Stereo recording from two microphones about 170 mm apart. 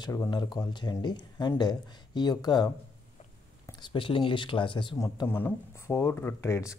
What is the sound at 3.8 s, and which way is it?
Speech, 30° left (ahead or behind).